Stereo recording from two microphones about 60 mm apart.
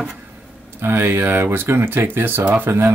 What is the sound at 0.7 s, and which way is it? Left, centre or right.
Speech, right.